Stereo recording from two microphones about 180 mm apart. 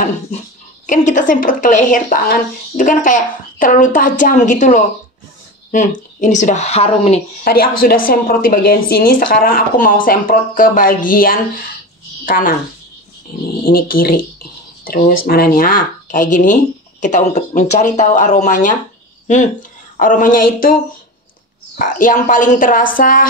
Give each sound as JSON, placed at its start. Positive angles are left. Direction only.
{"t": 0.8, "sound": "a woman's voice", "side_deg": 45}
{"t": 7.4, "sound": "a woman's voice", "side_deg": 55}
{"t": 13.7, "sound": "a woman's voice", "side_deg": 55}
{"t": 21.7, "sound": "a woman's voice", "side_deg": 45}